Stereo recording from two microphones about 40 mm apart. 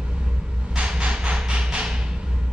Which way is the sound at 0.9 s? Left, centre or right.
Right.